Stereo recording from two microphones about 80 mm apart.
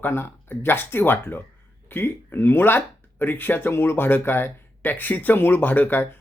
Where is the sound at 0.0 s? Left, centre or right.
Left.